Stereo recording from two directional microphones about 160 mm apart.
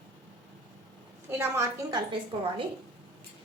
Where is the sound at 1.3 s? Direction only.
15° right (ahead or behind).